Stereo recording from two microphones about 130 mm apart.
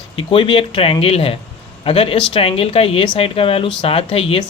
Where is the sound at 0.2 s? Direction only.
45° left (ahead or behind).